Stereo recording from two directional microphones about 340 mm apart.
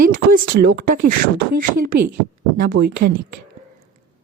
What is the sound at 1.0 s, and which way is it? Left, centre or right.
Speech, right.